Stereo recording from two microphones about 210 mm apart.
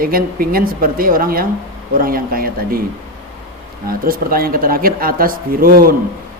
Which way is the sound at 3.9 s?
45° right (ahead or behind).